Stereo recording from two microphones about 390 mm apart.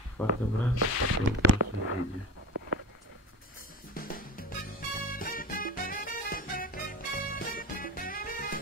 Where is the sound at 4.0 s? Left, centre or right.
Left.